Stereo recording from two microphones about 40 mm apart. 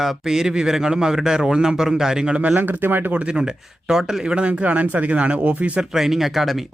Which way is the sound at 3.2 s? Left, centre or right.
Right.